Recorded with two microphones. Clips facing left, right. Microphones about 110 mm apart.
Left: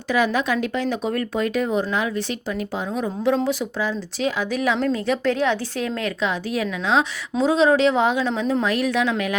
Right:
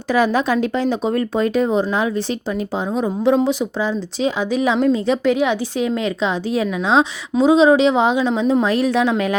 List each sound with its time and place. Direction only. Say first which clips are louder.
0.1 s speech: right 4 dB; 35° right (ahead or behind)
7.3 s speech: right 5 dB; 15° right (ahead or behind)
8.6 s speech: right 4 dB; 30° right (ahead or behind)